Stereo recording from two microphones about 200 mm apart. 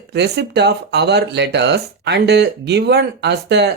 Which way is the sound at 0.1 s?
55° right (ahead or behind).